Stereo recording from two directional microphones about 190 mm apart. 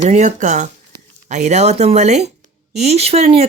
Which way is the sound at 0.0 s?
40° right (ahead or behind).